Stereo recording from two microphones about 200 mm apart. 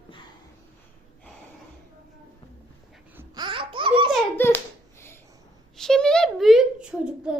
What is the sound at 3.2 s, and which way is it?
Babbling, 20° right (ahead or behind).